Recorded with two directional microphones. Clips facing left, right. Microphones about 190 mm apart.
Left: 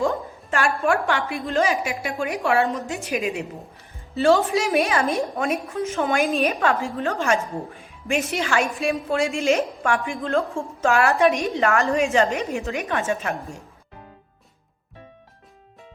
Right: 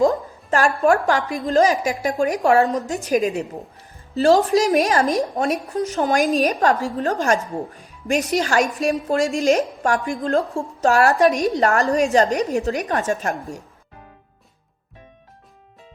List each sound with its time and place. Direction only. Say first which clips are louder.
0.0 s a woman's voice: right 6 dB; 40° right (ahead or behind)
13.3 s speech: right 2 dB; centre (ahead or behind)